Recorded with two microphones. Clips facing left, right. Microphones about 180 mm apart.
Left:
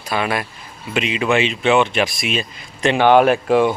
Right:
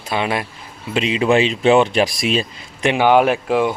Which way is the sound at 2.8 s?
10° right (ahead or behind).